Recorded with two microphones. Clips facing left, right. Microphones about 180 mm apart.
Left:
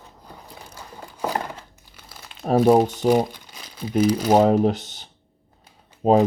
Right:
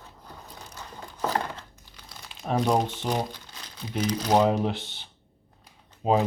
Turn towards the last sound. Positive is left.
turn(degrees=40)  # may be behind; listen again after turning